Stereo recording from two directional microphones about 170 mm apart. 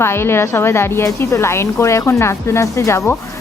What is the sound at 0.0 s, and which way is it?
A woman's voice, 15° left (ahead or behind).